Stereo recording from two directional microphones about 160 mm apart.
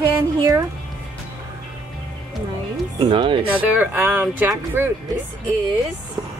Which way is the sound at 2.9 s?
30° right (ahead or behind).